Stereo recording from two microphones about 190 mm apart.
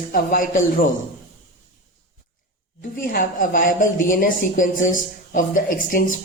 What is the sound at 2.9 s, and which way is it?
A woman's voice, 45° left (ahead or behind).